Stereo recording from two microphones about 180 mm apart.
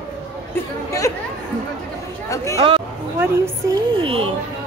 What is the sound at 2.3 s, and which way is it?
Speech, 15° left (ahead or behind).